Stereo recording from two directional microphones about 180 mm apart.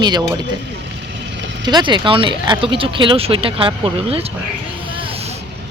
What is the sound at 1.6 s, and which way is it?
Speech, 25° right (ahead or behind).